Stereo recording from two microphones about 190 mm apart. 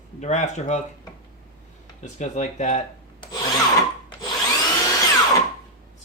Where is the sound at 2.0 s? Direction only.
40° left (ahead or behind).